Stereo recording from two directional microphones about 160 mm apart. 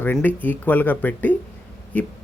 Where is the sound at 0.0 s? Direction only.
10° left (ahead or behind).